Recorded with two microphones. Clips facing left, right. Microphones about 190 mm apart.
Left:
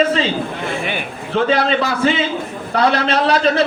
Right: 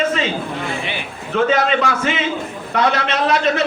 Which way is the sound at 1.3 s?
30° left (ahead or behind).